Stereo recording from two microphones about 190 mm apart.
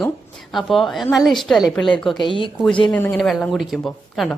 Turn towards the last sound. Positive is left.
turn(degrees=0)  # may be behind; listen again after turning